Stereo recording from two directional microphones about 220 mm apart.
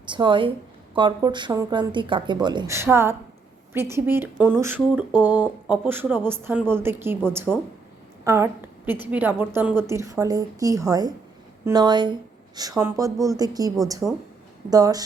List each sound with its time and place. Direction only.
0.1 s a woman's voice: 20° right (ahead or behind)
14.0 s speech: centre (ahead or behind)
14.7 s speech: 15° right (ahead or behind)